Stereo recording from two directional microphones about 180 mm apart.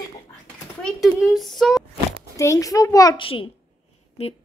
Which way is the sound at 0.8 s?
Centre (ahead or behind).